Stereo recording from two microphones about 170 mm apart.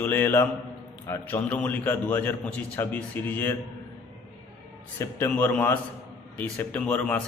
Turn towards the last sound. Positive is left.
turn(degrees=10)  # may be behind; listen again after turning